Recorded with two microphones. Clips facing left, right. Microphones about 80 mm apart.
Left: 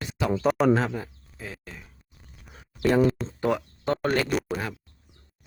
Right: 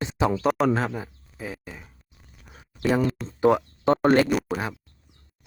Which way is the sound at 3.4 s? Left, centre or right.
Right.